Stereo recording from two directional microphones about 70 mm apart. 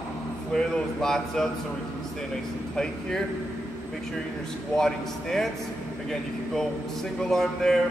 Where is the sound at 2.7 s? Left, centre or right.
Centre.